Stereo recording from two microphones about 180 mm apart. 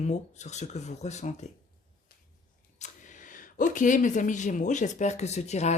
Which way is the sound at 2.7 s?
40° left (ahead or behind).